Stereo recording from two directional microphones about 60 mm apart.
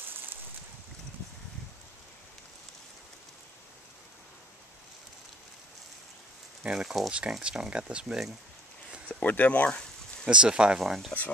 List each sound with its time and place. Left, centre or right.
6.6 s speech: centre
9.1 s speech: left
10.2 s speech: centre
10.9 s speech: centre